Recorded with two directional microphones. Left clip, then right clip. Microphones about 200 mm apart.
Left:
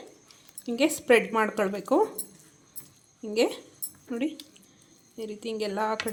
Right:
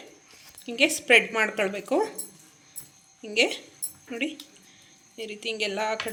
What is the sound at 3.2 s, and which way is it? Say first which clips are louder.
Speech: right 2 dB; 45° left (ahead or behind).